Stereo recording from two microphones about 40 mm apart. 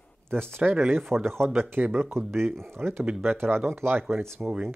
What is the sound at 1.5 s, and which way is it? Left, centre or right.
Speech, right.